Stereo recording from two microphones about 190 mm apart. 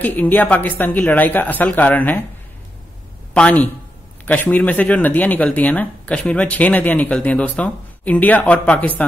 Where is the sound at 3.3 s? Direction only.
5° left (ahead or behind).